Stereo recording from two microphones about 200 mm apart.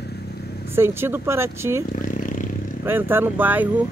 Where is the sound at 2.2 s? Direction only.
40° left (ahead or behind).